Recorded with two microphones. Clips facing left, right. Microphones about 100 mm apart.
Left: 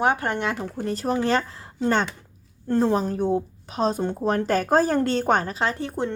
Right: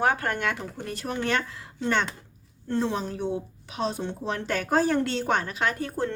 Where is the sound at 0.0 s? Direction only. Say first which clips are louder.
Left 2 dB; 20° left (ahead or behind).